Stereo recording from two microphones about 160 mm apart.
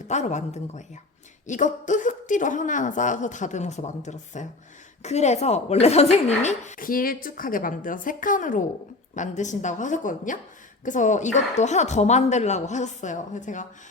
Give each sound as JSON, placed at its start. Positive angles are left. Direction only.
{"t": 0.1, "sound": "a woman's voice", "side_deg": 45}
{"t": 6.7, "sound": "a woman's voice", "side_deg": 60}